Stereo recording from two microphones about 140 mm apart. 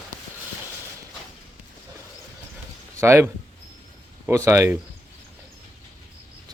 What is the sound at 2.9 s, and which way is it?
A man's voice, 20° right (ahead or behind).